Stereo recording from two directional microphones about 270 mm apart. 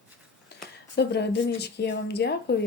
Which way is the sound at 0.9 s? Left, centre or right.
Left.